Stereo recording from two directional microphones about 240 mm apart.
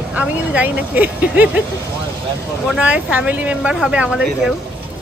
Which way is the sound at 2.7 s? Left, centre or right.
Centre.